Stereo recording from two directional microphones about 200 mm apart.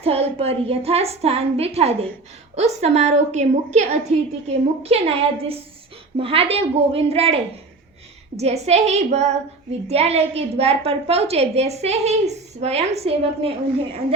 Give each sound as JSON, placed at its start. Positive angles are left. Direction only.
{"t": 0.0, "sound": "a child's voice", "side_deg": -30}
{"t": 8.4, "sound": "a child's voice", "side_deg": -30}